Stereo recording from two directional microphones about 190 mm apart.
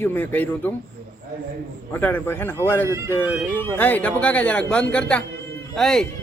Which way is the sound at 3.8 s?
10° left (ahead or behind).